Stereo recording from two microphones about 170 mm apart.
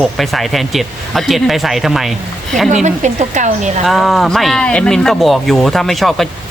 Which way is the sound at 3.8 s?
Centre (ahead or behind).